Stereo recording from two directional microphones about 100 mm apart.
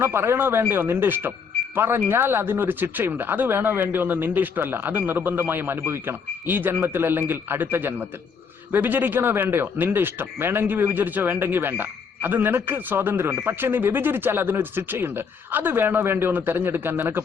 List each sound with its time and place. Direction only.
0.0 s speech: 25° right (ahead or behind)